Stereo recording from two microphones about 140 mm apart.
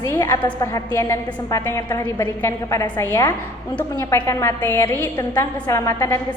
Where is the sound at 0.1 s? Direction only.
15° left (ahead or behind).